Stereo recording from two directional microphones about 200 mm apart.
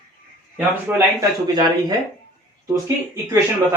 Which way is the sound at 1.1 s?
20° right (ahead or behind).